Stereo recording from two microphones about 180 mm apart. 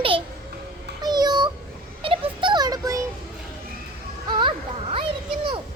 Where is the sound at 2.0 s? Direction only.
30° right (ahead or behind).